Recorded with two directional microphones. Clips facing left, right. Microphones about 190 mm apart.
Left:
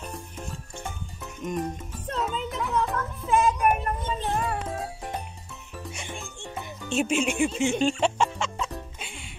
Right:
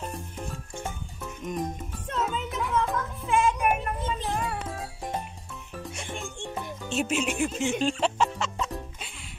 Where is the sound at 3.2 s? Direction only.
40° left (ahead or behind).